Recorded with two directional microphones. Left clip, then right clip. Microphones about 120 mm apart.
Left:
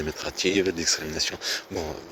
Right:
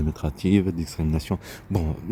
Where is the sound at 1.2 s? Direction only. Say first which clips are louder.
Left 6 dB; 25° right (ahead or behind).